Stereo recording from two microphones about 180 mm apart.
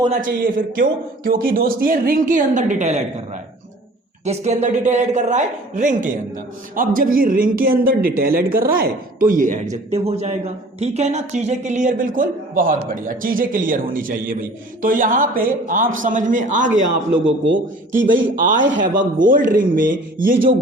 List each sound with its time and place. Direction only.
0.1 s speech: 50° right (ahead or behind)
4.3 s a woman's voice: 40° right (ahead or behind)
9.9 s speech: 35° right (ahead or behind)
17.2 s a man's voice: 90° right
18.8 s speech: 45° right (ahead or behind)